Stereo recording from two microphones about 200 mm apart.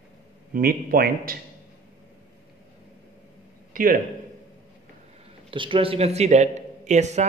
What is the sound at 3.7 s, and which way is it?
Speech, 45° right (ahead or behind).